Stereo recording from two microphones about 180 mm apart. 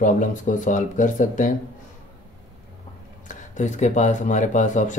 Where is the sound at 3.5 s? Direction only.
45° left (ahead or behind).